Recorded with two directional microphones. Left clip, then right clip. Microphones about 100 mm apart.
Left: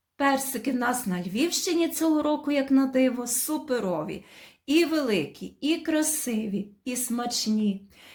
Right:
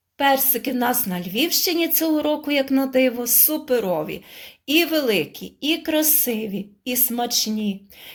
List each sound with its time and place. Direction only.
0.2 s a woman's voice: 10° right (ahead or behind)